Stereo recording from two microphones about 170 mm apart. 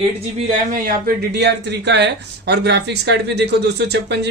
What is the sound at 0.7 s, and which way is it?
Speech, 60° right (ahead or behind).